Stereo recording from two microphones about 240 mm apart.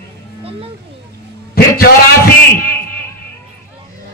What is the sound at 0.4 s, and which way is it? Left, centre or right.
Music, right.